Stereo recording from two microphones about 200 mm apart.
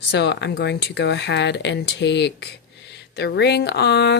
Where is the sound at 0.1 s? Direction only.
55° left (ahead or behind).